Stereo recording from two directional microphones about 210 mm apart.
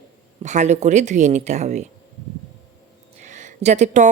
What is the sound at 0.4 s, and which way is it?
Speech, 35° right (ahead or behind).